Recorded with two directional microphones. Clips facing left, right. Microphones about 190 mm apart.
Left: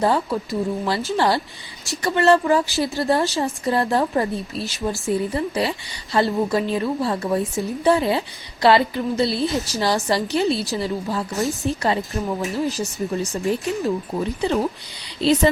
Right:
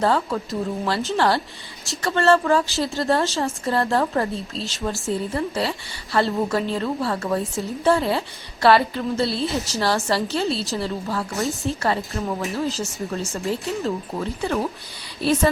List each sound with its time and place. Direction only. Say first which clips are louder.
0.0 s a woman's voice: left 1 dB; 15° left (ahead or behind)